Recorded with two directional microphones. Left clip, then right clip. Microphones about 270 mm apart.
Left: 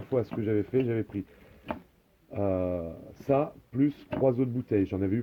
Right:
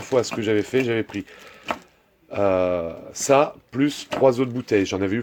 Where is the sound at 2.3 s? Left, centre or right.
Centre.